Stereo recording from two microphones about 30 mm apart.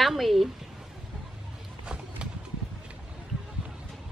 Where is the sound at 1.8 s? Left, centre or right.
Right.